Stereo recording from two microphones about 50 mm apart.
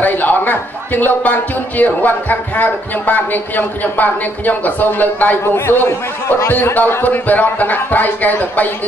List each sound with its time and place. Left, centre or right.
0.0 s a man's voice: left
5.4 s a man's voice: left
6.5 s a man's voice: left